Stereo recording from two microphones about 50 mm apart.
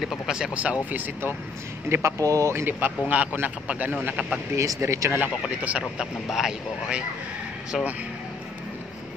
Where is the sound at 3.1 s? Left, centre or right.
Right.